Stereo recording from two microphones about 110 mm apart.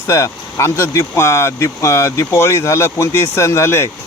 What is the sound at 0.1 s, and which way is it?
Speech, 30° left (ahead or behind).